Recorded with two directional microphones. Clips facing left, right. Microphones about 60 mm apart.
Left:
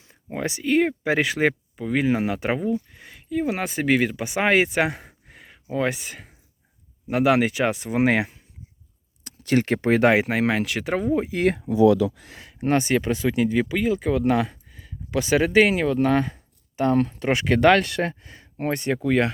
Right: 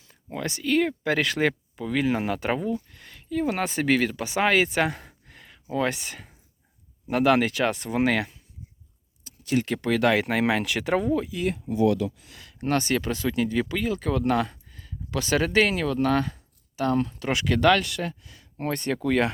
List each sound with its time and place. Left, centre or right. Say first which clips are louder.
0.0 s speech: left 3 dB; left
4.7 s gasp: left 2 dB; centre
5.7 s speech: left 2 dB; centre
9.2 s a sound: left 4 dB; left
9.6 s speech: left 4 dB; left
10.2 s speech: left 1 dB; centre
11.3 s speech: left 6 dB; left
12.5 s speech: left 4 dB; centre
16.7 s speech: left 4 dB; left
17.7 s speech: left 5 dB; left
18.6 s speech: left 3 dB; centre